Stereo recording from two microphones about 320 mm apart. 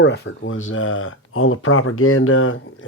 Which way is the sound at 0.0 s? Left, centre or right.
Left.